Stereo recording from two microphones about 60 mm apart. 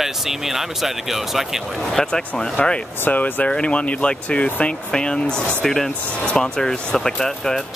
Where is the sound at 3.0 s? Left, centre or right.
Left; by 7.6 s centre.